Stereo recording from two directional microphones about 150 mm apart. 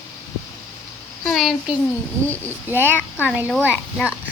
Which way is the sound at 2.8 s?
15° left (ahead or behind).